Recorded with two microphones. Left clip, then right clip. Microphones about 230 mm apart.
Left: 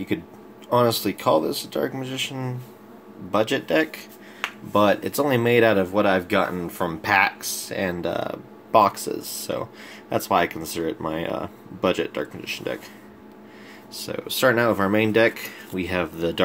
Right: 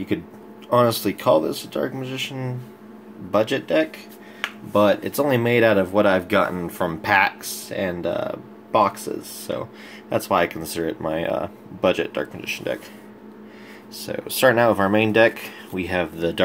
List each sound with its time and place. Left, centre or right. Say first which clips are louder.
0.7 s speech: right 2 dB; centre
13.9 s speech: right 1 dB; centre